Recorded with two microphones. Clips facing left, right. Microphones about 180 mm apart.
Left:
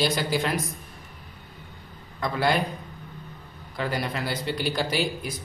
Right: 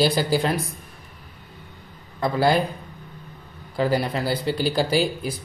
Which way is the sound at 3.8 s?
35° right (ahead or behind).